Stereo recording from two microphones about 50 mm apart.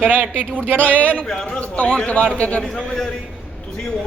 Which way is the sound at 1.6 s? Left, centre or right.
Left.